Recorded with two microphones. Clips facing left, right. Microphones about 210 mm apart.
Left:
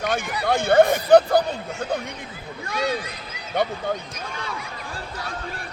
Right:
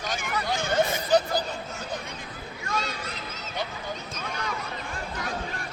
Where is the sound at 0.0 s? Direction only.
60° left (ahead or behind).